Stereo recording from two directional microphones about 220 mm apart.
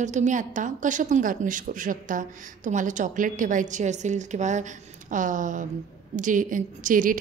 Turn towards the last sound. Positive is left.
turn(degrees=-35)  # may be behind; listen again after turning